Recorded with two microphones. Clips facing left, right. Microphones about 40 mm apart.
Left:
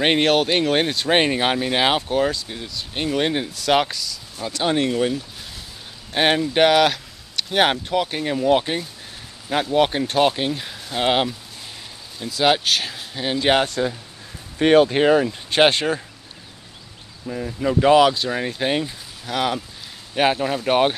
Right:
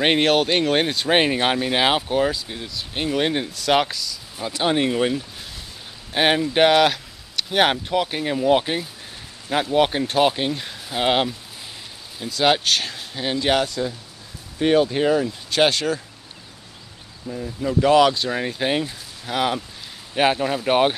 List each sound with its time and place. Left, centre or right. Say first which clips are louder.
0.0 s speech: even; centre
4.4 s speech: even; centre
6.1 s speech: even; centre
13.4 s speech: left 2 dB; left
13.7 s speech: left 3 dB; left
14.6 s speech: left 3 dB; left
15.5 s speech: left 2 dB; left
17.3 s speech: left 3 dB; left
17.9 s speech: left 1 dB; centre